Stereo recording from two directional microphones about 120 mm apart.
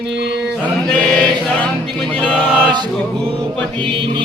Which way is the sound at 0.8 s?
10° left (ahead or behind).